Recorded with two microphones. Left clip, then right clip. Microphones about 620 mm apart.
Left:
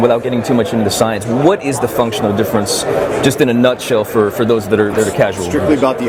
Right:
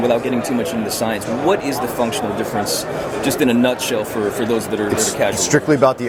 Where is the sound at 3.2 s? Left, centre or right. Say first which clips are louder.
Left 2 dB; left.